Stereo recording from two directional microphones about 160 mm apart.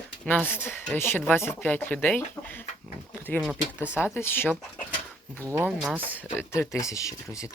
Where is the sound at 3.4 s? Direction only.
5° right (ahead or behind).